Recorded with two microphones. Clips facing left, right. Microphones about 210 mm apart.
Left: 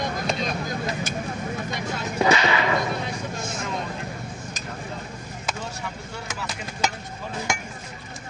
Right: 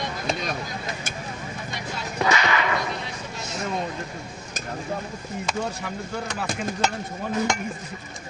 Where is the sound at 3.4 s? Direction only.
50° left (ahead or behind).